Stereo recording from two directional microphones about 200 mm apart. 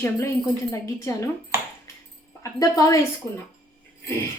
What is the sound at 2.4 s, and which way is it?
Speech, 15° left (ahead or behind).